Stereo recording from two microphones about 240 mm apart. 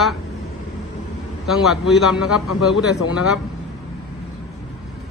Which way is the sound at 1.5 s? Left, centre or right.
Centre.